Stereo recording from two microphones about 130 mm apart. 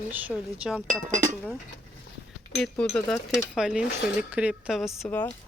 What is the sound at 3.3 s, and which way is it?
Speech, 5° right (ahead or behind).